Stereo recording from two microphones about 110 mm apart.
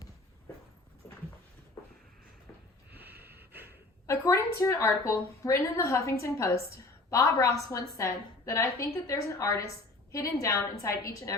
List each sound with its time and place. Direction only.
2.9 s snort: 15° right (ahead or behind)
4.0 s a woman's voice: 25° left (ahead or behind)